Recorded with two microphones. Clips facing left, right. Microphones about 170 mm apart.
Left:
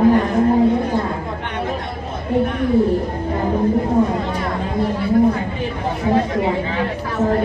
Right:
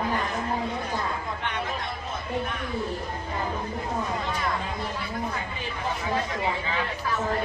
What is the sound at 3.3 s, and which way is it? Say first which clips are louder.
Music: left 11 dB; 45° left (ahead or behind).